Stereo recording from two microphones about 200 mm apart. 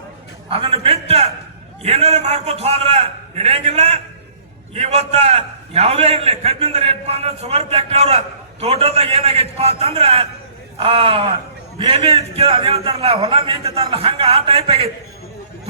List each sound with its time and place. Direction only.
0.5 s a man's voice: 30° right (ahead or behind)